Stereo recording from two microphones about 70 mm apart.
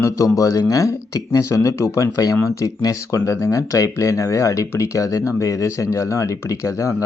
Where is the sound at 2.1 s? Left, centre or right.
Left.